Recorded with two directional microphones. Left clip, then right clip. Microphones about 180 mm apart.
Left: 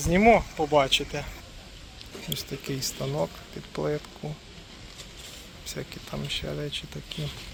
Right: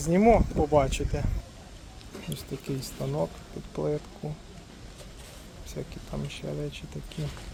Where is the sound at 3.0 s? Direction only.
5° left (ahead or behind).